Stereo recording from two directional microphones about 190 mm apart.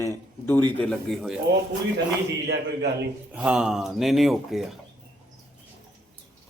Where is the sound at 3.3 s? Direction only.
5° right (ahead or behind).